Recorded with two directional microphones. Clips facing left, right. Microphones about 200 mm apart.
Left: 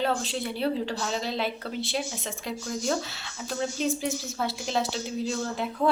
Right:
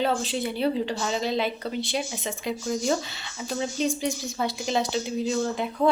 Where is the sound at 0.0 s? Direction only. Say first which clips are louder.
Right 2 dB; centre (ahead or behind).